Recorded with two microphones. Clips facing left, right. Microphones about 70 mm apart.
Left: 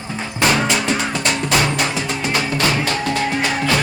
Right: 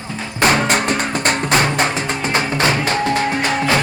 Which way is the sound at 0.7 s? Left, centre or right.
Right.